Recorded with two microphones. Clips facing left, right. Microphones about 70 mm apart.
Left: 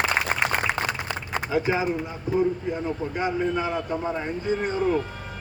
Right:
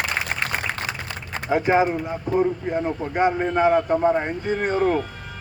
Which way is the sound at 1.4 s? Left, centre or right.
Right.